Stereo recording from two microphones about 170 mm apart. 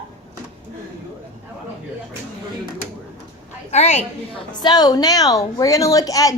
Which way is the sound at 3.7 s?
40° left (ahead or behind).